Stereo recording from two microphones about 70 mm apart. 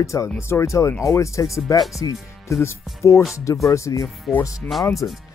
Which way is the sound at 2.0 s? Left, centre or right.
Left.